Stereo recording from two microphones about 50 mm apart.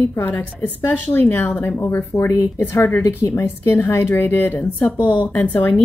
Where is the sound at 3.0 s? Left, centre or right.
Left.